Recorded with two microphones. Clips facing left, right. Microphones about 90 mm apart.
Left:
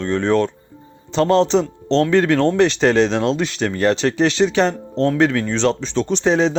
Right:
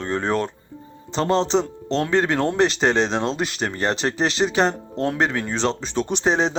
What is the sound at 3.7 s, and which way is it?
Speech, 25° right (ahead or behind).